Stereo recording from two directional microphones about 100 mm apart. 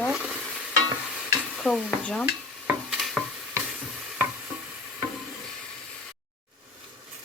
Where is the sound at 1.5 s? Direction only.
5° left (ahead or behind).